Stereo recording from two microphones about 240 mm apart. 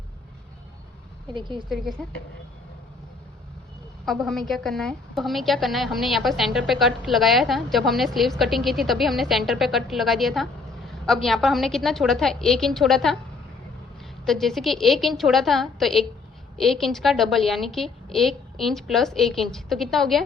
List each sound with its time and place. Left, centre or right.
1.3 s a woman's voice: centre
1.7 s a woman's voice: centre
4.0 s a woman's voice: centre